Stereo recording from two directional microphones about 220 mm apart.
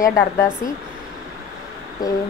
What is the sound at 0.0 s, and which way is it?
Speech, 15° left (ahead or behind).